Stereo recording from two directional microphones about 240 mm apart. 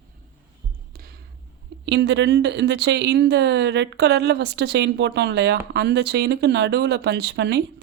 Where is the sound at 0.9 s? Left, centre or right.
Right.